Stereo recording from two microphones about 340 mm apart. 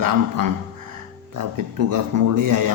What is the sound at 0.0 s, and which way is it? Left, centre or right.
A man's voice, right.